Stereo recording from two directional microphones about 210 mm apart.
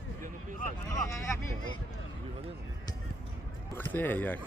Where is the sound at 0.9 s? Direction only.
15° left (ahead or behind).